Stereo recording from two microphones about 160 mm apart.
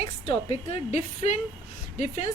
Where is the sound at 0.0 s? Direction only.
40° left (ahead or behind).